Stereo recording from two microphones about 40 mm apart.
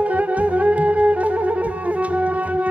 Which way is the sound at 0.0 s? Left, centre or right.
Right.